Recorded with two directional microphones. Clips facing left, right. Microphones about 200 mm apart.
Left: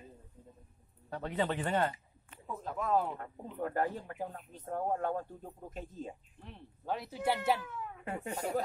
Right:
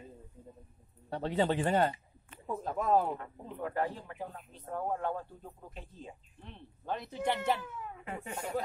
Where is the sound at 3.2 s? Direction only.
45° left (ahead or behind).